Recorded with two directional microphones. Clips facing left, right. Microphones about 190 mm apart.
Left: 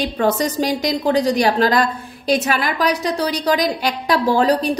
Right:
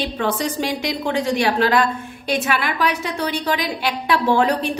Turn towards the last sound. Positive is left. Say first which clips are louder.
# left 2 dB
turn(degrees=35)  # may be behind; listen again after turning